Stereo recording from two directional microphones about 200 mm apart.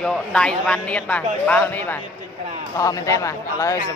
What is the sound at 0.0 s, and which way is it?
A man's voice, 5° left (ahead or behind).